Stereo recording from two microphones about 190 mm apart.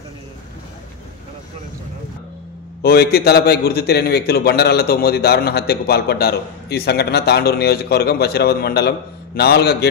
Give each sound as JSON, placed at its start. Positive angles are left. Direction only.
{"t": 2.8, "sound": "a man's voice", "side_deg": 55}